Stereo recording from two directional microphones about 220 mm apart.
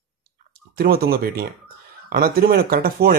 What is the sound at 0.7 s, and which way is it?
Speech, 45° right (ahead or behind).